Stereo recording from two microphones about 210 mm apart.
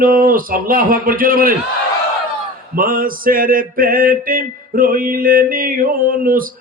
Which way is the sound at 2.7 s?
45° right (ahead or behind).